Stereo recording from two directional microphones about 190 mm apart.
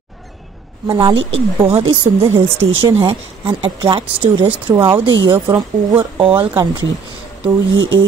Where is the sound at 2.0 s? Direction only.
15° right (ahead or behind).